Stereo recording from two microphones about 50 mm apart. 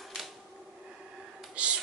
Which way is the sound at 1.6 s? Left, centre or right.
Right.